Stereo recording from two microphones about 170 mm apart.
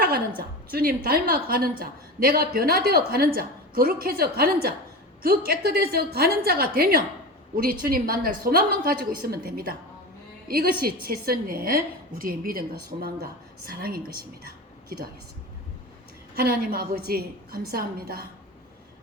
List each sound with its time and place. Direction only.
0.7 s a woman's voice: 60° right (ahead or behind)
16.3 s a woman's voice: 60° right (ahead or behind)